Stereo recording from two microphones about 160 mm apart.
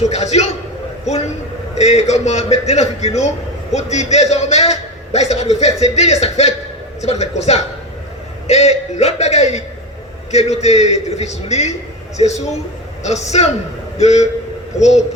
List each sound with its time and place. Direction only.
0.0 s a man's voice: 45° left (ahead or behind)